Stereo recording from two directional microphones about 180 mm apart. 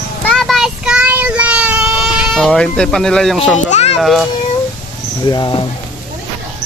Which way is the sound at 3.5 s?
40° left (ahead or behind).